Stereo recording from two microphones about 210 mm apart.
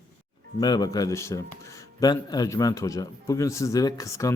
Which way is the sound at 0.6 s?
20° left (ahead or behind).